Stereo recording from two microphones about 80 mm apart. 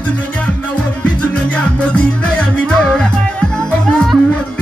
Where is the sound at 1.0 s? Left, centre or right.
Centre.